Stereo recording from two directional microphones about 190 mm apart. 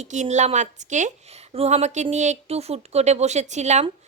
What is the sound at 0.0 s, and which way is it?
A woman's voice, 40° right (ahead or behind).